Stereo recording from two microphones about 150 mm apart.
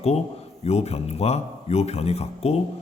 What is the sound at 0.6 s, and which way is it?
A man's voice, 45° left (ahead or behind).